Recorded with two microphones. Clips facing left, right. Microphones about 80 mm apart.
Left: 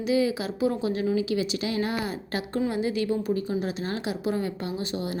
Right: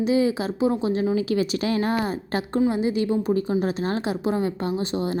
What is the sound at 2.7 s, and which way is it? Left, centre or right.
Speech, right.